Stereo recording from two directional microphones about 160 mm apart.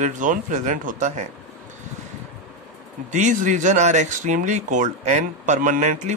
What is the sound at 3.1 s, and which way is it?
Speech, 50° right (ahead or behind).